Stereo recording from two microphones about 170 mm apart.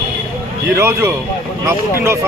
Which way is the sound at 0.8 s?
15° right (ahead or behind).